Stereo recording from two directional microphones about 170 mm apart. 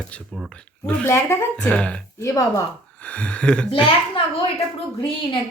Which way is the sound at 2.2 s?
20° left (ahead or behind).